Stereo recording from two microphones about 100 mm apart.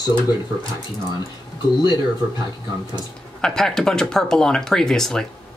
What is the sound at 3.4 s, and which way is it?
Speech, 5° left (ahead or behind).